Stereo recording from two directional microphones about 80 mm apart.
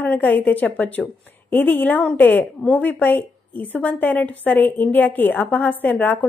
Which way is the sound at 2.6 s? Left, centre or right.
Centre.